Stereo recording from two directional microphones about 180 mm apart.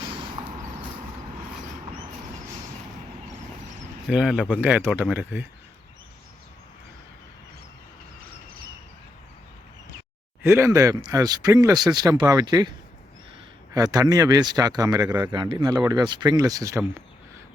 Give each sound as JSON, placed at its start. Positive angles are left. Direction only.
{"t": 0.0, "sound": "a sound", "side_deg": -30}
{"t": 4.1, "sound": "speech", "side_deg": -5}
{"t": 10.4, "sound": "speech", "side_deg": -15}
{"t": 13.7, "sound": "speech", "side_deg": -20}